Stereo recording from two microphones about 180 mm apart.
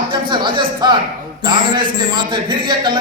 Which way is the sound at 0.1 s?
25° right (ahead or behind).